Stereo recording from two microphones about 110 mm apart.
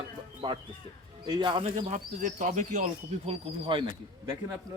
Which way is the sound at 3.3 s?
55° right (ahead or behind).